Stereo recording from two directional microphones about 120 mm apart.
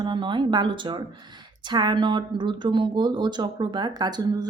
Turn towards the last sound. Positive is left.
turn(degrees=-35)  # may be behind; listen again after turning